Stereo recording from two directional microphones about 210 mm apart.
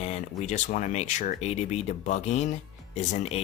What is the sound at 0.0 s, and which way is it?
Speech, 35° left (ahead or behind).